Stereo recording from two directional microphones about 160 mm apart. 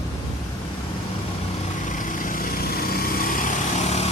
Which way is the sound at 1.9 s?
55° left (ahead or behind).